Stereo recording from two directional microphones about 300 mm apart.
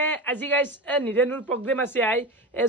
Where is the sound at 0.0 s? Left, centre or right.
Centre.